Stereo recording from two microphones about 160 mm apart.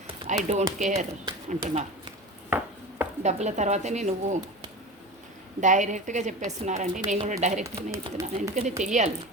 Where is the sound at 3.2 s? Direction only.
45° right (ahead or behind).